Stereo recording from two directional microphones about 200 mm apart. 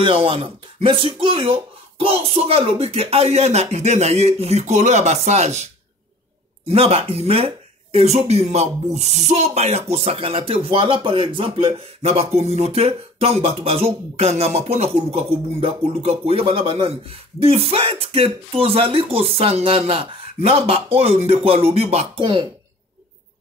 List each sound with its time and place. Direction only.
0.0 s speech: 25° right (ahead or behind)